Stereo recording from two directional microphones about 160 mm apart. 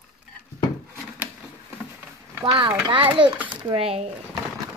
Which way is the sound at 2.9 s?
30° right (ahead or behind).